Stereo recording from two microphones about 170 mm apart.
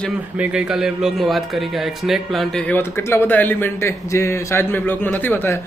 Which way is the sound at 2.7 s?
10° left (ahead or behind).